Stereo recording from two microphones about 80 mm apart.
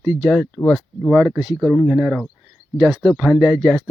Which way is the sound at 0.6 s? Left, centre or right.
Centre.